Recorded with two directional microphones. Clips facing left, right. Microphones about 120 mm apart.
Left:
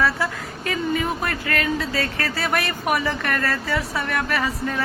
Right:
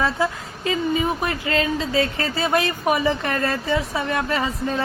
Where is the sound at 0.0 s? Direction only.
20° right (ahead or behind).